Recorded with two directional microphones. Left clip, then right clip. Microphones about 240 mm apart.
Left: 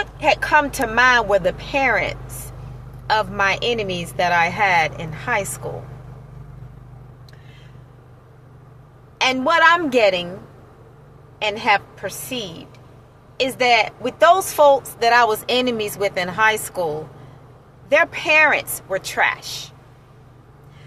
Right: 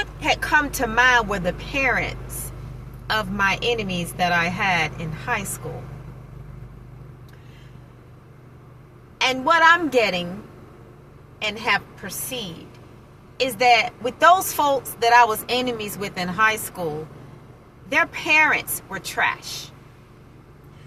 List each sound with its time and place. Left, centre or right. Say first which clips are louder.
0.3 s a woman's voice: left 4 dB; centre
9.1 s a woman's voice: left 2 dB; centre
11.3 s a woman's voice: left 4 dB; centre
17.8 s a woman's voice: left 4 dB; centre